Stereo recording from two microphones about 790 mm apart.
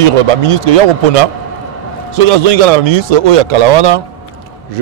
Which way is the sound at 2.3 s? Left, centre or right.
Right.